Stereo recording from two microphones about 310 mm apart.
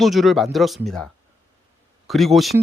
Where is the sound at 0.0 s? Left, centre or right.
Centre.